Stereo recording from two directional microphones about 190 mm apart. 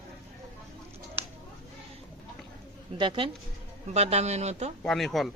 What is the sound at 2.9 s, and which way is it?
Speech, 25° right (ahead or behind).